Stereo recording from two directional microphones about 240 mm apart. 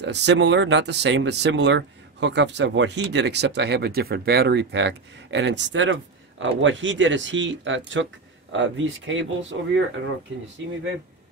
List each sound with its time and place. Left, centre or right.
0.0 s speech: right